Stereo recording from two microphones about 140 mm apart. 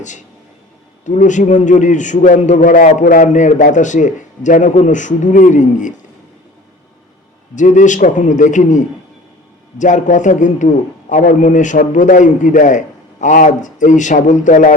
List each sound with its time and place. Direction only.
0.0 s a man's voice: 60° left (ahead or behind)
7.5 s a man's voice: 60° left (ahead or behind)